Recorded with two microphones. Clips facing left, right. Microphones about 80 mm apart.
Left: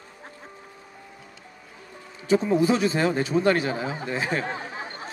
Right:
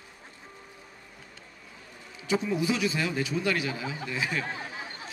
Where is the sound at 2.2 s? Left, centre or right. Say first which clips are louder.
Left 7 dB; left.